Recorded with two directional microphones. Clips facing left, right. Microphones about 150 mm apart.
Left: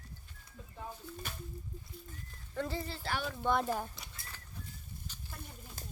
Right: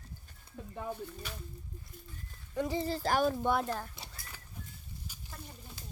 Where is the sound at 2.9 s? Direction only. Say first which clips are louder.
Right 9 dB; 40° right (ahead or behind).